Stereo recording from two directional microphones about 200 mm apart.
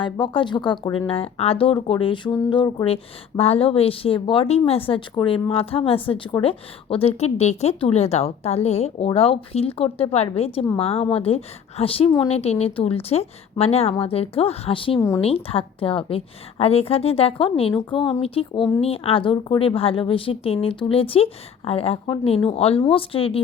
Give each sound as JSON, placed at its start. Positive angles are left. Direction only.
{"t": 0.0, "sound": "a woman's voice", "side_deg": 25}